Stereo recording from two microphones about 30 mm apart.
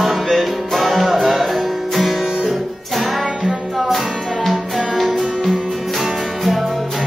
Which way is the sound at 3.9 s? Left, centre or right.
Centre.